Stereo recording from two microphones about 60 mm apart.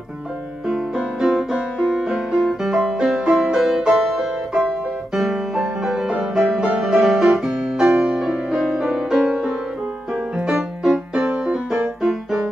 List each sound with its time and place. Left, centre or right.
0.7 s music: centre
10.8 s music: centre
12.0 s music: centre